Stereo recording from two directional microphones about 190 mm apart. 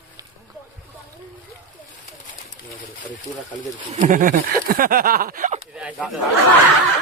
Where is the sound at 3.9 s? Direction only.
45° right (ahead or behind).